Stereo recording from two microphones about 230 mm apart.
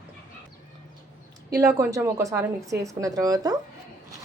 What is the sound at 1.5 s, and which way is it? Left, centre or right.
A woman's voice, centre.